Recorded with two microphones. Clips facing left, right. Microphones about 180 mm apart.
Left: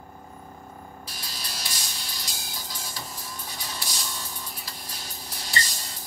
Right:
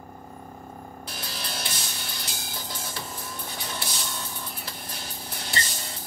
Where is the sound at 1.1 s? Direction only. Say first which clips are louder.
Right 6 dB; 60° right (ahead or behind).